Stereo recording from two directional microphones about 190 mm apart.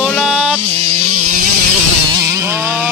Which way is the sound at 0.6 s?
35° right (ahead or behind).